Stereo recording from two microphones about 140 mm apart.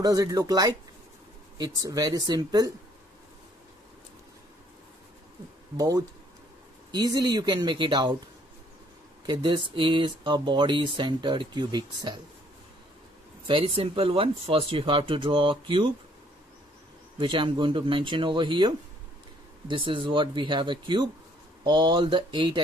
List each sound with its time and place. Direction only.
0.0 s speech: 25° right (ahead or behind)
5.8 s speech: 25° right (ahead or behind)
9.2 s speech: 30° right (ahead or behind)
13.5 s speech: 40° right (ahead or behind)
17.2 s speech: 35° right (ahead or behind)